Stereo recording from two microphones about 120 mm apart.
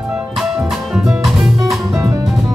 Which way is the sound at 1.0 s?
Centre (ahead or behind).